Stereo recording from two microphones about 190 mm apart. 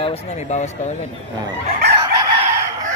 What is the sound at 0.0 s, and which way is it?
Speech, 35° left (ahead or behind).